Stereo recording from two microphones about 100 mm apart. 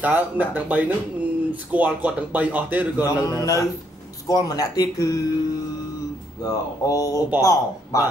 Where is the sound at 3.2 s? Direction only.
35° left (ahead or behind).